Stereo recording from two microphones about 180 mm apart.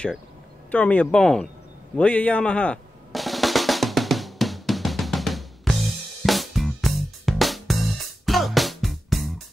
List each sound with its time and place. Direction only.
0.7 s speech: 10° left (ahead or behind)
2.0 s drum: 10° left (ahead or behind)
6.2 s music: centre (ahead or behind)